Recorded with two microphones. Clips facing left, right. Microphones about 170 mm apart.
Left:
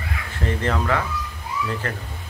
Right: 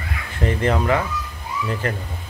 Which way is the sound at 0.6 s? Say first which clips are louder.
Right 4 dB; 20° right (ahead or behind).